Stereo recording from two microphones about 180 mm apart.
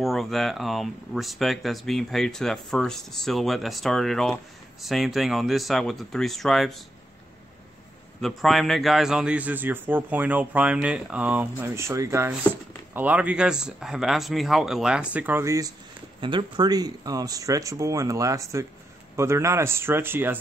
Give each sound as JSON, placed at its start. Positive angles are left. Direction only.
{"t": 0.0, "sound": "speech", "side_deg": 0}
{"t": 8.2, "sound": "a man's voice", "side_deg": 0}
{"t": 16.2, "sound": "a man's voice", "side_deg": -25}